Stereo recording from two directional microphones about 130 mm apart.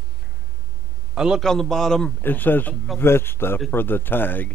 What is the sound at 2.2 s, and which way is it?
Speech, 15° left (ahead or behind).